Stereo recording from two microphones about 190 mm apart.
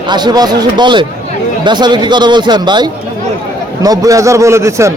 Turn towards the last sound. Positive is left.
turn(degrees=-15)  # may be behind; listen again after turning